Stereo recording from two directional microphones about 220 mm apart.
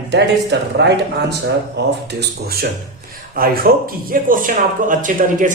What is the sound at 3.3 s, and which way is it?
A man's voice, 40° right (ahead or behind).